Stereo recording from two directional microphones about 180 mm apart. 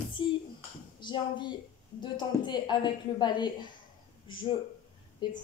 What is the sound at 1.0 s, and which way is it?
A woman's voice, 25° left (ahead or behind).